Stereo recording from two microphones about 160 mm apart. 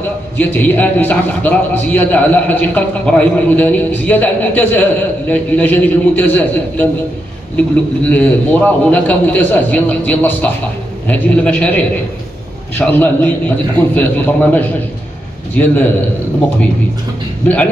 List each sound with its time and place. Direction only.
0.4 s a man's voice: 10° left (ahead or behind)